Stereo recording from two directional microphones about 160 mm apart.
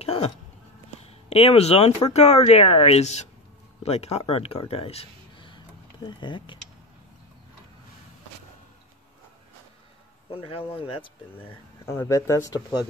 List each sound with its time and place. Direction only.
0.0 s a sound: 40° left (ahead or behind)
1.0 s a woman's voice: 35° left (ahead or behind)
10.3 s a woman's voice: 35° left (ahead or behind)
11.9 s speech: 20° left (ahead or behind)